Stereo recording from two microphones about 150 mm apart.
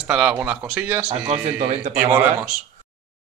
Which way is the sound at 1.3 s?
50° right (ahead or behind).